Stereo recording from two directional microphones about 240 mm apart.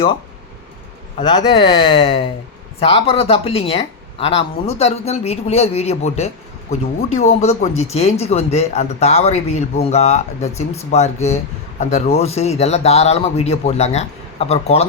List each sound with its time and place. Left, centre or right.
1.2 s speech: centre